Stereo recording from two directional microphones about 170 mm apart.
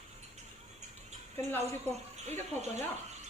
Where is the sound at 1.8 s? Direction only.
40° right (ahead or behind).